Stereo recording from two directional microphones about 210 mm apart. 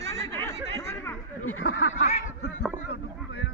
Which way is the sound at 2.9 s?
50° left (ahead or behind).